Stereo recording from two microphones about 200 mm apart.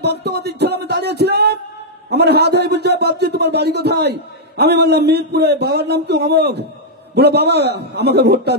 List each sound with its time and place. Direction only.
0.0 s a man's voice: 55° right (ahead or behind)